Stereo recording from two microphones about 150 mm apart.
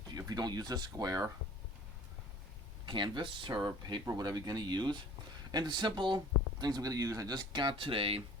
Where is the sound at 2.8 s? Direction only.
30° right (ahead or behind).